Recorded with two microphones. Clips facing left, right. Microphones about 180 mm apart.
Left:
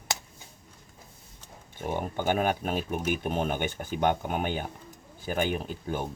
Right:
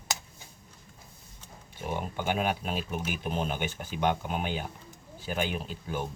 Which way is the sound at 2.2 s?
45° left (ahead or behind).